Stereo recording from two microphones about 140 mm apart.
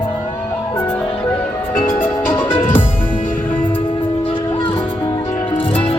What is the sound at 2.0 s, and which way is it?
Music, 15° left (ahead or behind).